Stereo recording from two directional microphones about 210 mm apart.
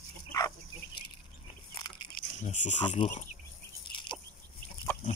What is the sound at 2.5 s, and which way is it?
Speech, 35° left (ahead or behind).